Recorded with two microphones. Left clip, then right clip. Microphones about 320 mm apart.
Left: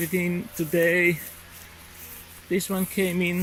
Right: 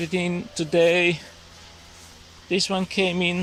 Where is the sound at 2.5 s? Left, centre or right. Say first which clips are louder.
Right 4 dB; centre.